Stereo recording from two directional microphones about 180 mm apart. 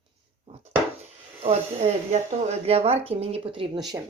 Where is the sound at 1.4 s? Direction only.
35° right (ahead or behind).